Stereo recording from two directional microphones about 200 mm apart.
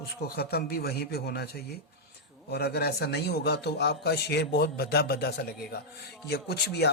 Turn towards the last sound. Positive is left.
turn(degrees=55)  # may be behind; listen again after turning